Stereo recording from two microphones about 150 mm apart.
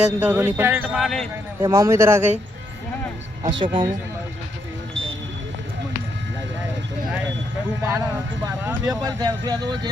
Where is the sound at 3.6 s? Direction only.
30° right (ahead or behind).